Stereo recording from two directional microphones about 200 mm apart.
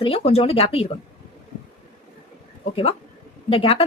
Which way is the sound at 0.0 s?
30° left (ahead or behind).